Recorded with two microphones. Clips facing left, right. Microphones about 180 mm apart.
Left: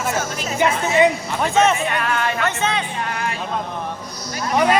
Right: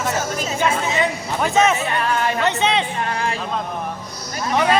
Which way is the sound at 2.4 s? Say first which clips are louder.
Right 3 dB; 20° right (ahead or behind).